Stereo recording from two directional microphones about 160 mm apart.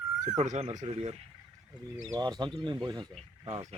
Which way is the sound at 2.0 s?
25° right (ahead or behind).